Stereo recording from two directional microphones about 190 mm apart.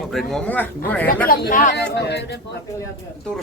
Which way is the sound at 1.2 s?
50° left (ahead or behind).